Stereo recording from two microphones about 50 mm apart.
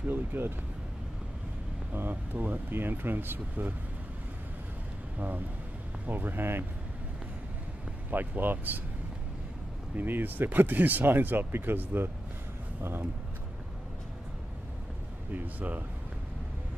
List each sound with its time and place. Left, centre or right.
0.1 s speech: right
2.0 s speech: right
6.0 s speech: right
8.1 s speech: right
9.9 s speech: right
15.3 s speech: right